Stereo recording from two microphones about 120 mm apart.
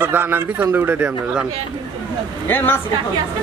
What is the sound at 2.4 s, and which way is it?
Speech, 20° left (ahead or behind).